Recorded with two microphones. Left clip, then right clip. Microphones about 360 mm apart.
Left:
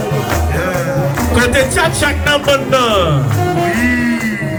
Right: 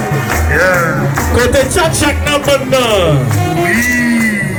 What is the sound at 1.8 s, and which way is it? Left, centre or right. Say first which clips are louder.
Music: right 1 dB; right.